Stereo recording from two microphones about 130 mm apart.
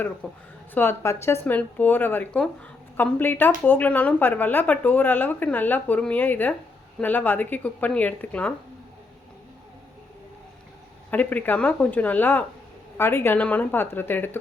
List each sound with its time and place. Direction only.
0.2 s speech: 10° left (ahead or behind)
11.1 s speech: 10° left (ahead or behind)